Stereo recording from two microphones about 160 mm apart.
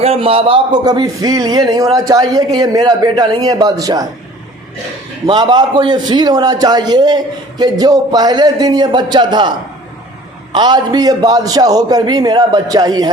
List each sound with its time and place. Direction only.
0.0 s a man's voice: 35° right (ahead or behind)
5.2 s a man's voice: 30° right (ahead or behind)